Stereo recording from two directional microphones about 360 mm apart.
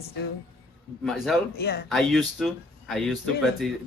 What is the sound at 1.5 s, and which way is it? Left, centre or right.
Speech, left.